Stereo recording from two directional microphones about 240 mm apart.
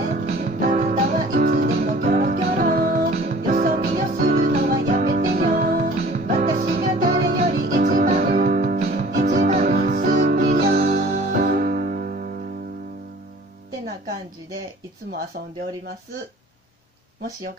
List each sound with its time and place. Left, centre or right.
0.3 s music: right